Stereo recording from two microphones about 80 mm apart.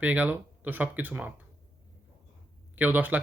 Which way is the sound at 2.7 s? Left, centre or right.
Right.